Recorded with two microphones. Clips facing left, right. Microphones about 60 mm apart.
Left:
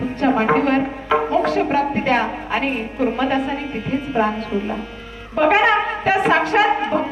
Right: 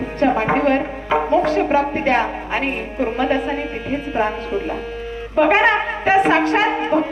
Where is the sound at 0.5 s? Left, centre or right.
Centre.